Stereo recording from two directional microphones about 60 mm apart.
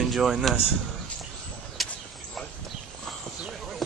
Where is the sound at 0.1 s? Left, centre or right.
Centre.